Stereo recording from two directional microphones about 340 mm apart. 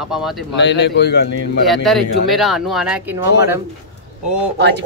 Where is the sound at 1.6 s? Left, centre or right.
Centre.